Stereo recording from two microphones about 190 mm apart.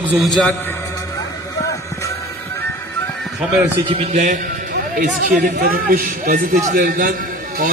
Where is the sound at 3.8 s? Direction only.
30° right (ahead or behind).